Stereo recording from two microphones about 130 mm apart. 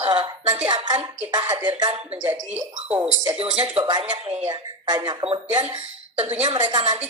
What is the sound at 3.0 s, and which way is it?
Speech, 45° right (ahead or behind).